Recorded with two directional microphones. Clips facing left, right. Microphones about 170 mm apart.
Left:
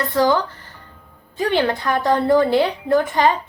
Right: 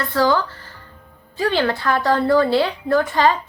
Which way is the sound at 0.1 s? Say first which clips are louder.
Even; 20° left (ahead or behind).